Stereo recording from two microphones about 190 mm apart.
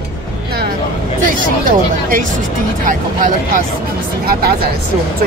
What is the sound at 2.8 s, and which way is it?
Speech, 45° right (ahead or behind).